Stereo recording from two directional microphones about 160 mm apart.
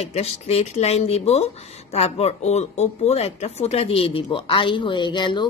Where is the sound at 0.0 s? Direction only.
40° left (ahead or behind).